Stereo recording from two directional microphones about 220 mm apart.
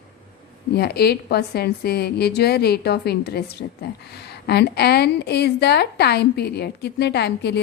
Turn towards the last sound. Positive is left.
turn(degrees=50)  # may be behind; listen again after turning